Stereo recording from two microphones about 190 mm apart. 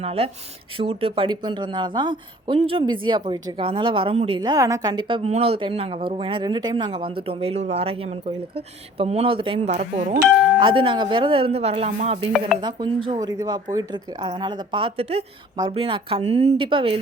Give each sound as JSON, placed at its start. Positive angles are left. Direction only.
{"t": 0.0, "sound": "a woman's voice", "side_deg": -30}
{"t": 10.6, "sound": "a woman's voice", "side_deg": -25}